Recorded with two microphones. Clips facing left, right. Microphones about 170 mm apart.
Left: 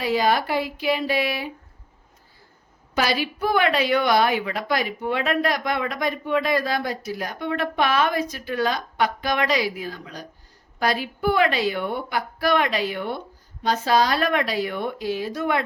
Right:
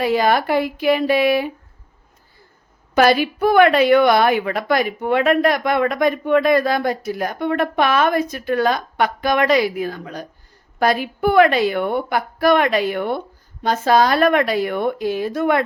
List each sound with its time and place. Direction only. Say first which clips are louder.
0.0 s a woman's voice: right 4 dB; 55° right (ahead or behind)
2.9 s a woman's voice: right 9 dB; 55° right (ahead or behind)